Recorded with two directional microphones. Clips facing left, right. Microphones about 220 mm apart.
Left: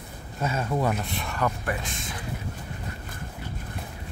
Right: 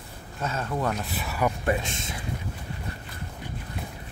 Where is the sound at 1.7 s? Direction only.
25° right (ahead or behind).